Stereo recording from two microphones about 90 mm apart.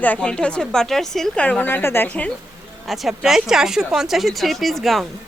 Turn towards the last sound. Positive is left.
turn(degrees=0)  # may be behind; listen again after turning